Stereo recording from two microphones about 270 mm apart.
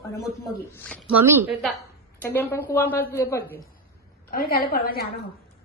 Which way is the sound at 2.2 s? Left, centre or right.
Centre.